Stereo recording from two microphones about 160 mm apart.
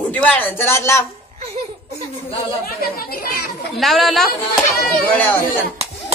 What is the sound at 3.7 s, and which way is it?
Speech, centre (ahead or behind).